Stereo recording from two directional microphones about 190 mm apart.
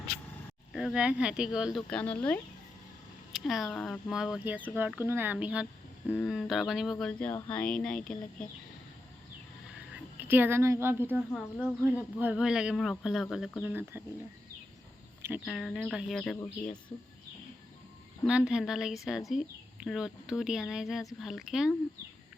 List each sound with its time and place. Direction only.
0.7 s speech: centre (ahead or behind)
9.9 s speech: 10° right (ahead or behind)
11.3 s speech: 5° left (ahead or behind)
11.8 s speech: 10° right (ahead or behind)
15.4 s speech: centre (ahead or behind)
18.3 s speech: 5° right (ahead or behind)